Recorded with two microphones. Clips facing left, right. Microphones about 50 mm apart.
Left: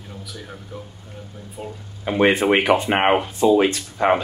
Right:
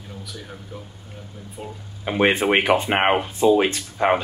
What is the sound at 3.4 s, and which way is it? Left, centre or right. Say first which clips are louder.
Speech: even; right.